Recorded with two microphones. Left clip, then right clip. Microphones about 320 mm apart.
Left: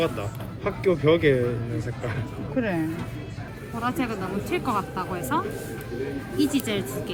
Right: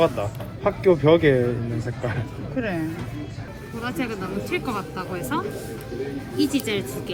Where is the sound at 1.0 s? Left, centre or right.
Centre.